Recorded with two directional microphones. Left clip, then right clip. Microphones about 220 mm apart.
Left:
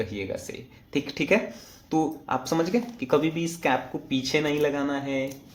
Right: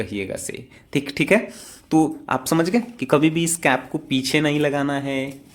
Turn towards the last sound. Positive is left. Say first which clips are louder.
# right 4 dB
turn(degrees=-40)  # may be behind; listen again after turning